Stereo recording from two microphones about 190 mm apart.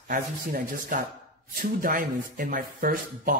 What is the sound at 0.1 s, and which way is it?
A man's voice, 50° right (ahead or behind).